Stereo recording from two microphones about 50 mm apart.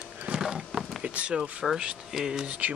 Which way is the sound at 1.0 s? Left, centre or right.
Right.